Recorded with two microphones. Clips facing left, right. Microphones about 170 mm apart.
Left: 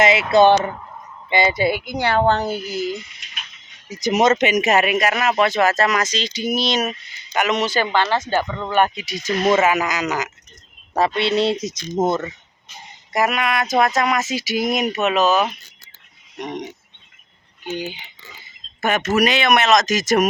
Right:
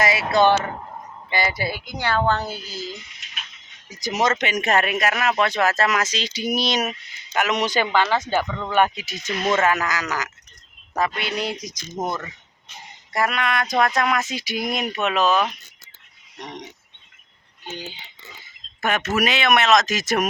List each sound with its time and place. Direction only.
0.0 s speech: 25° left (ahead or behind)
2.5 s speech: 65° left (ahead or behind)
3.8 s speech: 20° left (ahead or behind)
4.6 s speech: 5° left (ahead or behind)
7.6 s speech: 15° right (ahead or behind)
8.4 s a sound: 10° left (ahead or behind)
9.2 s speech: 40° left (ahead or behind)
9.6 s speech: 5° left (ahead or behind)
9.8 s speech: 20° left (ahead or behind)
13.1 s a sound: 10° left (ahead or behind)
14.0 s speech: 5° left (ahead or behind)
16.4 s speech: 20° left (ahead or behind)
17.7 s a sound: 15° left (ahead or behind)
18.8 s speech: centre (ahead or behind)